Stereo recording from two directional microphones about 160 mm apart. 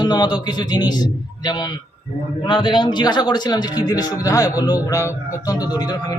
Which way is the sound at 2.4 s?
30° left (ahead or behind).